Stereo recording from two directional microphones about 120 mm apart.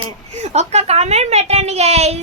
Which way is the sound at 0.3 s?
70° right (ahead or behind).